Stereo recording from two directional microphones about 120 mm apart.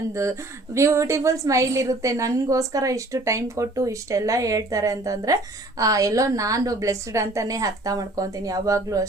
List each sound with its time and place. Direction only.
0.1 s a woman's voice: 25° right (ahead or behind)